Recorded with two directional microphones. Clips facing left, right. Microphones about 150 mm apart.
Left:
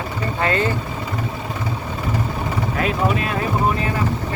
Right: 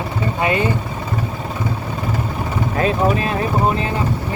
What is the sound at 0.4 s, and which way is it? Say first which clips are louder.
Speech: right 1 dB; 15° right (ahead or behind).